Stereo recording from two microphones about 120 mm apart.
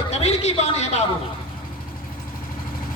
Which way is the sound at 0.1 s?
65° left (ahead or behind).